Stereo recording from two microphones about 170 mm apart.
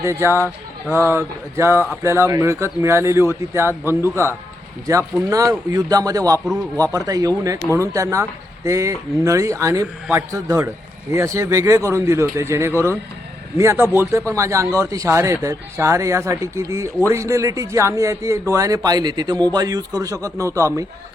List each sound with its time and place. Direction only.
0.0 s a man's voice: 15° right (ahead or behind)
6.4 s speech: 5° right (ahead or behind)
6.7 s a man's voice: 20° right (ahead or behind)